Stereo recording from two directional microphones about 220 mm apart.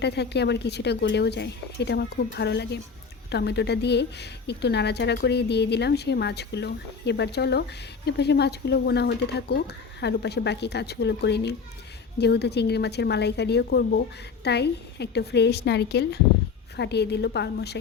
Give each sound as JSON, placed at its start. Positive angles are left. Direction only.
{"t": 0.0, "sound": "a woman's voice", "side_deg": 50}